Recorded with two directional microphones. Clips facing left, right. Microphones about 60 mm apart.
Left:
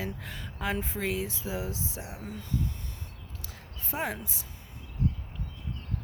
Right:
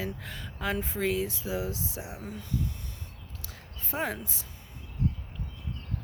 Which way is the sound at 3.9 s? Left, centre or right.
Centre.